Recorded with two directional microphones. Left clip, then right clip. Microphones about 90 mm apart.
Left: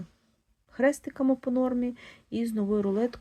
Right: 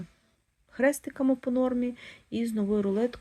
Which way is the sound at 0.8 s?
10° right (ahead or behind).